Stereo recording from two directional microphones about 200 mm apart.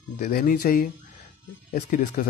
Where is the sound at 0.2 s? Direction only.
50° left (ahead or behind).